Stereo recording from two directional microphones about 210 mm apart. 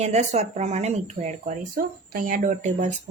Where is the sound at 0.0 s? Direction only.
30° right (ahead or behind).